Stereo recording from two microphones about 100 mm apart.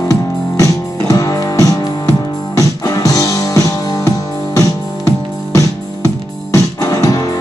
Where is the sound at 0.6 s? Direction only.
35° left (ahead or behind).